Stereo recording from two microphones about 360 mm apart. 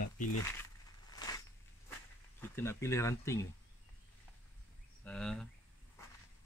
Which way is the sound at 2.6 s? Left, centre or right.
Centre.